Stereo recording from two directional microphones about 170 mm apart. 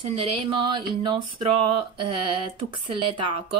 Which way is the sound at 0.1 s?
30° right (ahead or behind).